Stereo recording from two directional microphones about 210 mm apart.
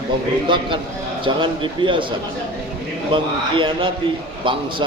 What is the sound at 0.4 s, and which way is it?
A man's voice, 25° right (ahead or behind).